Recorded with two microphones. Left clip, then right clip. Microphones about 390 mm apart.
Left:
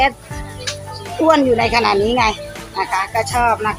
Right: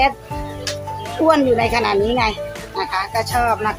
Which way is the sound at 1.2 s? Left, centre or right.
Right.